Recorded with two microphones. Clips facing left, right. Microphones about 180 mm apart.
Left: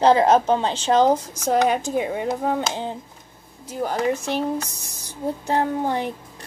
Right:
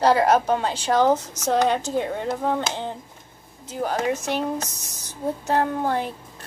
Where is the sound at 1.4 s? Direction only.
10° left (ahead or behind).